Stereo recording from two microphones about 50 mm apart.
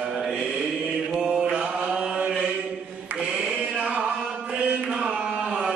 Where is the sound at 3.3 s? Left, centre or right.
Centre.